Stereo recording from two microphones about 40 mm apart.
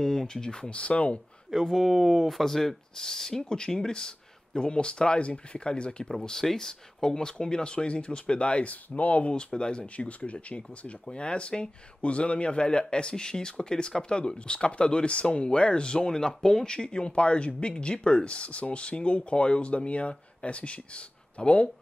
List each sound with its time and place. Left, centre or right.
0.0 s speech: centre
0.7 s speech: left
1.5 s speech: centre; by 6.0 s left
6.0 s speech: centre; by 9.3 s left
9.3 s speech: left